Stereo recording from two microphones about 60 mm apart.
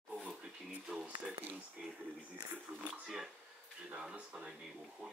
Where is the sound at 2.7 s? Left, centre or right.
Right.